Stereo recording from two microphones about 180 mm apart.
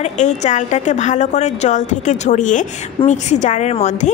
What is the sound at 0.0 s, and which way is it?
A woman's voice, 40° left (ahead or behind).